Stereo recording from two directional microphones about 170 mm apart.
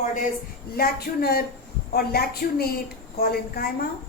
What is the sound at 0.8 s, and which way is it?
Speech, 65° left (ahead or behind).